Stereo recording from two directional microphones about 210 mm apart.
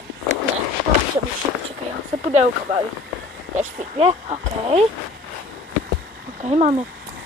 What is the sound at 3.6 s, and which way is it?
Speech, 30° right (ahead or behind).